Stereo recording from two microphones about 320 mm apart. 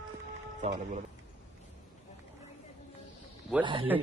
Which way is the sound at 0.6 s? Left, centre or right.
Right.